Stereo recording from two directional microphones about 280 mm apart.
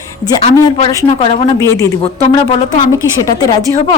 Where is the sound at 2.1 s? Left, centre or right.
Left.